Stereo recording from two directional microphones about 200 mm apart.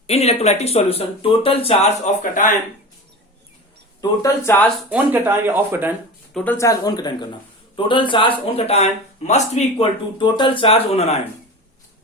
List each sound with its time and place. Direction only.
0.1 s speech: 30° left (ahead or behind)
4.0 s speech: 15° left (ahead or behind)
4.9 s speech: 10° right (ahead or behind)
6.3 s speech: 10° left (ahead or behind); by 11.2 s 30° left (ahead or behind)